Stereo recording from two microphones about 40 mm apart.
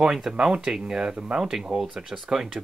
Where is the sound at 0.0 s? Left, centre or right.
Centre.